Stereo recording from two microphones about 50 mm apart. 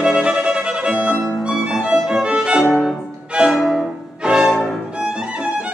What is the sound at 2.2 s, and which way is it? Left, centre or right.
Violin, right.